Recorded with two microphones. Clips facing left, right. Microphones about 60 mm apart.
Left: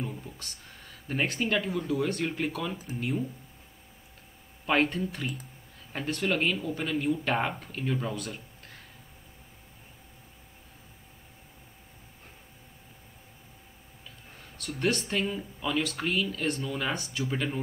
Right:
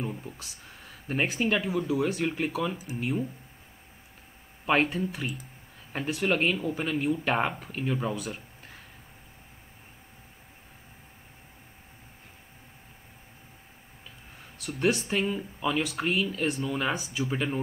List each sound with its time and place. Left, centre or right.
0.0 s speech: centre
4.6 s speech: centre
8.2 s a sound: centre
14.6 s speech: centre